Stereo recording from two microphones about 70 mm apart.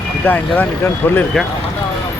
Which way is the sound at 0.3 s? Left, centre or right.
Left.